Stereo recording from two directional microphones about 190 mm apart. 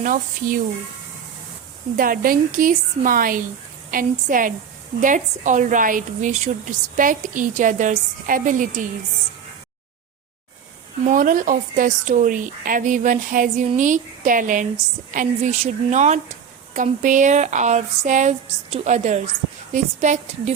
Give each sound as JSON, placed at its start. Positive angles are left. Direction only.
{"t": 0.0, "sound": "a woman's voice", "side_deg": -45}
{"t": 2.0, "sound": "a woman's voice", "side_deg": -50}
{"t": 11.0, "sound": "a woman's voice", "side_deg": -45}